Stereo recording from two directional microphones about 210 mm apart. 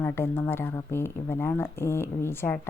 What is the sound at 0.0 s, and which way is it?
Speech, 10° left (ahead or behind).